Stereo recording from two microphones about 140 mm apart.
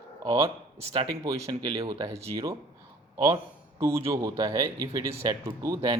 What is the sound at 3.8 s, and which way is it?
Speech, 20° right (ahead or behind).